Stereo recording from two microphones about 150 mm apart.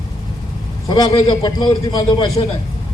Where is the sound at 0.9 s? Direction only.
25° left (ahead or behind).